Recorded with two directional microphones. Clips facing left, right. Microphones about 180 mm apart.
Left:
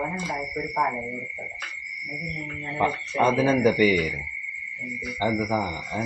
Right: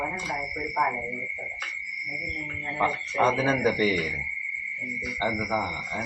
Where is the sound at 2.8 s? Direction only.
15° left (ahead or behind).